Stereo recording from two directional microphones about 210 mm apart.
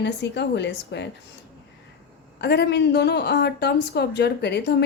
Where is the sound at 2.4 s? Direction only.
50° left (ahead or behind).